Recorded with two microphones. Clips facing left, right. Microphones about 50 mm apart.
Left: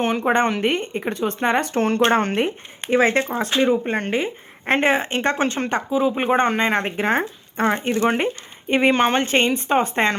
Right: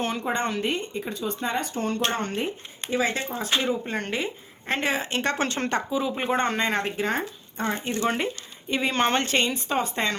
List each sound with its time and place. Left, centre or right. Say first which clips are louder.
0.0 s a woman's voice: left 8 dB; left
5.5 s speech: left 5 dB; centre; by 7.3 s left
7.5 s speech: left 8 dB; left
7.9 s a woman's voice: left 6 dB; left
9.0 s a woman's voice: left 5 dB; centre; by 10.2 s left